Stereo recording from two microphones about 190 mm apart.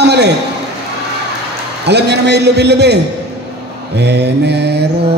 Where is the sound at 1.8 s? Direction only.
60° right (ahead or behind).